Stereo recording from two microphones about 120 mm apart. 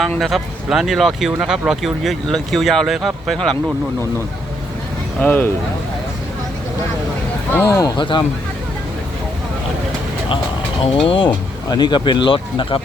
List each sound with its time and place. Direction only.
0.2 s speech: centre (ahead or behind)
5.2 s speech: 15° left (ahead or behind)
7.5 s speech: 20° left (ahead or behind)
7.9 s speech: 40° left (ahead or behind)
10.8 s speech: 50° left (ahead or behind)